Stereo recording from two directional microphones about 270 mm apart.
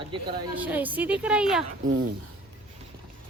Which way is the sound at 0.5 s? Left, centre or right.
Centre.